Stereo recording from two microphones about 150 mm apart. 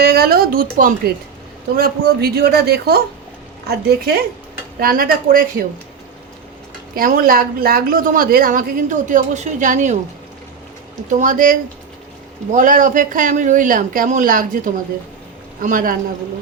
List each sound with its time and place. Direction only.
0.0 s speech: 90° right; by 1.1 s 70° right (ahead or behind)
1.7 s speech: 85° right
4.8 s a woman's voice: 75° right (ahead or behind)
6.9 s a woman's voice: 70° right (ahead or behind); by 10.0 s 55° right (ahead or behind)
11.1 s speech: 60° right (ahead or behind)